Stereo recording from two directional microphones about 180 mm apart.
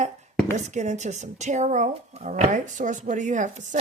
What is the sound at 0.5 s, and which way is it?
Speech, 40° right (ahead or behind).